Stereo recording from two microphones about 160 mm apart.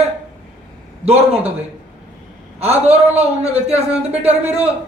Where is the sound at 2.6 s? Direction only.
40° right (ahead or behind).